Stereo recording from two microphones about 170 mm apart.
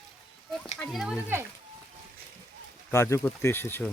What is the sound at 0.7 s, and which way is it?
Speech, centre (ahead or behind).